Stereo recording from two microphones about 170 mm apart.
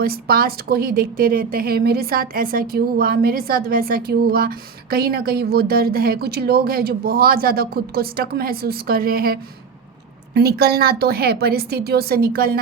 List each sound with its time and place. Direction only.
0.0 s a woman's voice: 65° right (ahead or behind)